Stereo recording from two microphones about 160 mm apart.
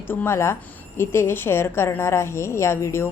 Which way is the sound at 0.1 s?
15° left (ahead or behind).